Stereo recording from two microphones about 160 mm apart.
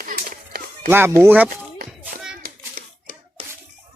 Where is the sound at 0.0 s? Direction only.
60° right (ahead or behind).